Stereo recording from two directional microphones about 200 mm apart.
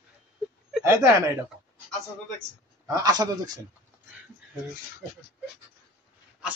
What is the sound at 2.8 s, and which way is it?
Speech, 15° right (ahead or behind).